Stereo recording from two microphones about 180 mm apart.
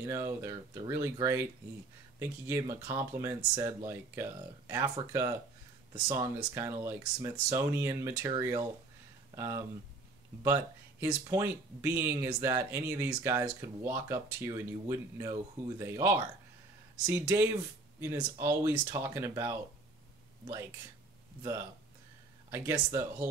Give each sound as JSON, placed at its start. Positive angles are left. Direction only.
{"t": 0.0, "sound": "speech", "side_deg": -15}
{"t": 22.5, "sound": "speech", "side_deg": -15}